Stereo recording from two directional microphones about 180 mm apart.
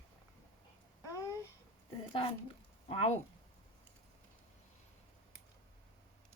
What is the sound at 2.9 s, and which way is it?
Speech, 30° left (ahead or behind).